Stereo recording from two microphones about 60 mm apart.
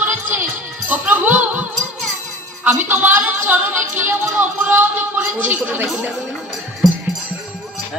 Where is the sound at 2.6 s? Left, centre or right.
Right.